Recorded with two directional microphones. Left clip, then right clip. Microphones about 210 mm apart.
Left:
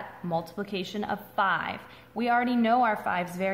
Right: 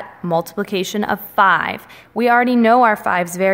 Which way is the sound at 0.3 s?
45° right (ahead or behind).